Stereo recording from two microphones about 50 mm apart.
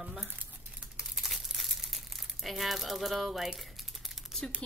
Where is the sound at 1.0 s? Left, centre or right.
Centre.